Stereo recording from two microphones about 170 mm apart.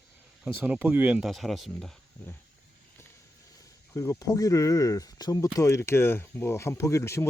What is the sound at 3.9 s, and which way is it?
Speech, 20° left (ahead or behind).